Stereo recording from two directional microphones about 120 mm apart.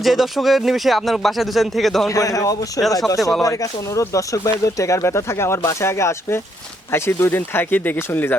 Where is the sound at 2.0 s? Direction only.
30° left (ahead or behind).